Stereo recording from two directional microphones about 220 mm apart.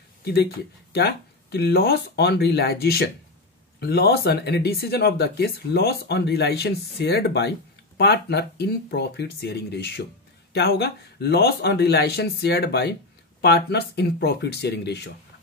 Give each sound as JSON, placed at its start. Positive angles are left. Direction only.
{"t": 0.2, "sound": "speech", "side_deg": 45}